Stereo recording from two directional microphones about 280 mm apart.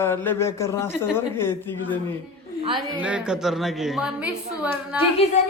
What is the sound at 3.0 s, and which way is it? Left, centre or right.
A woman's voice, centre.